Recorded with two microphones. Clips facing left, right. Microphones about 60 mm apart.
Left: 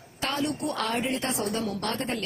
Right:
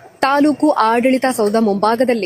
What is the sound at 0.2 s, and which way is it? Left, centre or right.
A woman's voice, right.